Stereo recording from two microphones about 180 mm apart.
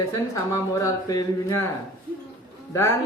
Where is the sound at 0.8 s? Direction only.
20° left (ahead or behind).